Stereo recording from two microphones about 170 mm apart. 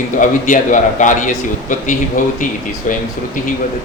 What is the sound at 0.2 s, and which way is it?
A man's voice, 50° left (ahead or behind).